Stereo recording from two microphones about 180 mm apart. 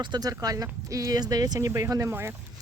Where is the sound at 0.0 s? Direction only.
20° right (ahead or behind).